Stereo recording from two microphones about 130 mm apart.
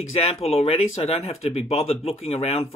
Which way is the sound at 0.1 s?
50° left (ahead or behind).